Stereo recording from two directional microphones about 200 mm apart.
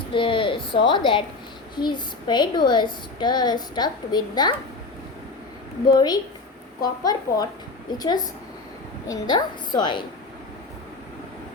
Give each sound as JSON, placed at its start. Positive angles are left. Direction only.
{"t": 0.1, "sound": "a sound", "side_deg": 25}
{"t": 0.9, "sound": "a child's voice", "side_deg": 25}
{"t": 5.9, "sound": "a child's voice", "side_deg": 20}